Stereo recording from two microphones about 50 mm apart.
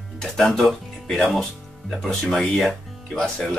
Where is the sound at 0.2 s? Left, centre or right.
Centre.